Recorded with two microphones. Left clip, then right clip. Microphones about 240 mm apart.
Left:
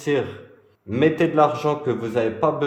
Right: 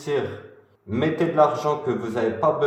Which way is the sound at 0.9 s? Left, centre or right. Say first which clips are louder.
Left 3 dB; left.